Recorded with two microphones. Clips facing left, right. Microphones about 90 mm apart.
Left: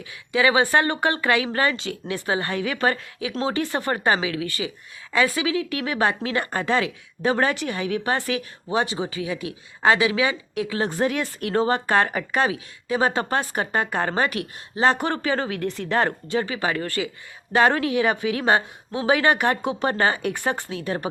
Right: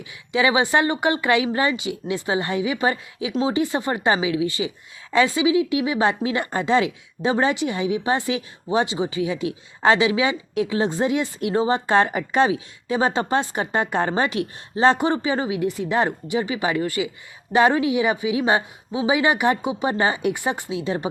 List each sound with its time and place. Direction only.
0.3 s a woman's voice: 20° right (ahead or behind)